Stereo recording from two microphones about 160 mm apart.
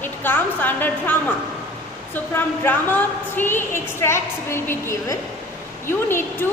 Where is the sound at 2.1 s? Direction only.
10° left (ahead or behind).